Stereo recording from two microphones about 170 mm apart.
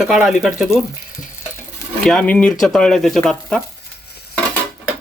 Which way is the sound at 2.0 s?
5° left (ahead or behind).